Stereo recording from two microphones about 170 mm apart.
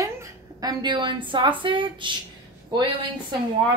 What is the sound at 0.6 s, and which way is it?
A woman's voice, 25° right (ahead or behind).